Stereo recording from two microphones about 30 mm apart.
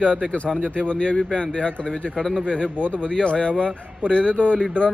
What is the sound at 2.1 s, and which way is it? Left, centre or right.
Speech, centre.